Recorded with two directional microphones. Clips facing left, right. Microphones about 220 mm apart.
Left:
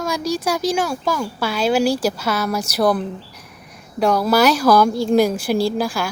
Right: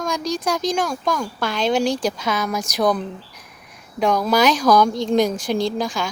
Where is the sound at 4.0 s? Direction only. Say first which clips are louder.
Left 2 dB; 5° left (ahead or behind).